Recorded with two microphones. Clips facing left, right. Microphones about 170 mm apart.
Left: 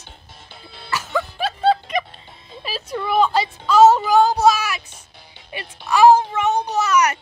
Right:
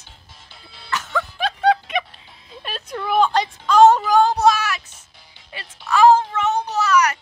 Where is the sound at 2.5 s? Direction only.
Centre (ahead or behind).